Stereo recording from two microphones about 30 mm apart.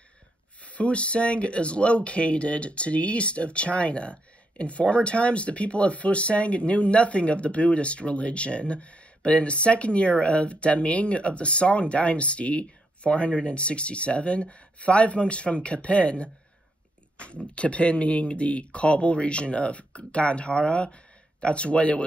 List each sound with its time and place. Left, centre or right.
0.6 s speech: left